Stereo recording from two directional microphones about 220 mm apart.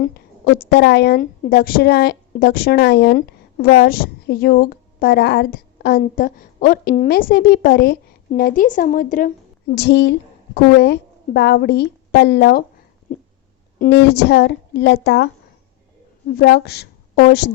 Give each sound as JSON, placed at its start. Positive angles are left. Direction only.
{"t": 0.0, "sound": "a woman's voice", "side_deg": 45}
{"t": 13.7, "sound": "a woman's voice", "side_deg": 45}
{"t": 16.3, "sound": "a woman's voice", "side_deg": 45}